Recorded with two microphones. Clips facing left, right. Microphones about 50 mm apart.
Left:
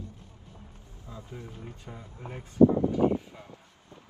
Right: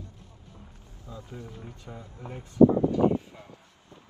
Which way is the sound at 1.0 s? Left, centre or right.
Left.